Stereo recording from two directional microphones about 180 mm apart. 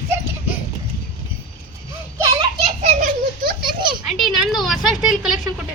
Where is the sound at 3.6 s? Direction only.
25° right (ahead or behind).